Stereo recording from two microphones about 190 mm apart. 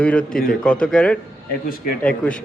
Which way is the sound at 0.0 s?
5° left (ahead or behind).